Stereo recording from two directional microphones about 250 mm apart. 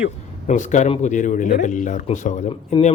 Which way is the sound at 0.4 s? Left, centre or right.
Left.